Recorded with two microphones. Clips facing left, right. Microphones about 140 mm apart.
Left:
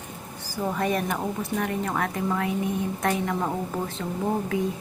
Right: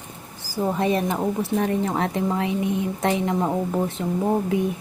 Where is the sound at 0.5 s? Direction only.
20° right (ahead or behind).